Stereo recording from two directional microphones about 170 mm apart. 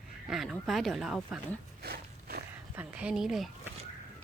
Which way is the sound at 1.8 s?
65° right (ahead or behind).